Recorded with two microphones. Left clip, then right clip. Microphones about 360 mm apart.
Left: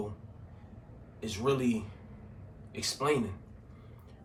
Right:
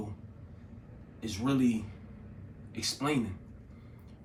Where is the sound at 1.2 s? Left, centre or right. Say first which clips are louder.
Left 1 dB; centre.